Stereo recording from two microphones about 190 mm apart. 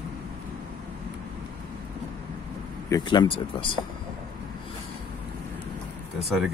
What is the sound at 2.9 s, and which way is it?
Speech, 25° left (ahead or behind).